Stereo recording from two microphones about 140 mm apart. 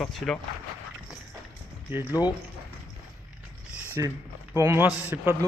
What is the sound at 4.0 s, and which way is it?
A man's voice, 25° right (ahead or behind).